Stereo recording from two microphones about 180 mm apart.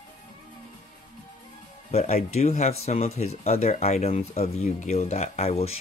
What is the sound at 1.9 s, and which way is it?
Speech, 35° left (ahead or behind).